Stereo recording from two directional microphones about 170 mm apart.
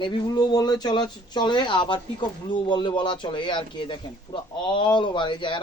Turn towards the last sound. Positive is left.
turn(degrees=30)  # may be behind; listen again after turning